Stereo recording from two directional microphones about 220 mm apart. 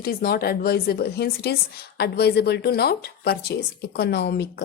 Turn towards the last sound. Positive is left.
turn(degrees=50)  # may be behind; listen again after turning